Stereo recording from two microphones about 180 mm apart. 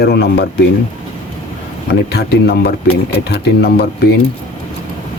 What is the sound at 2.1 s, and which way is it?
Speech, 60° left (ahead or behind).